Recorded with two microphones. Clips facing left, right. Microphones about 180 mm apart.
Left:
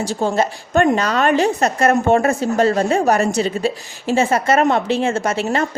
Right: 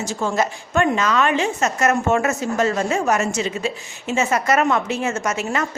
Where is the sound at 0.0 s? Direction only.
30° left (ahead or behind).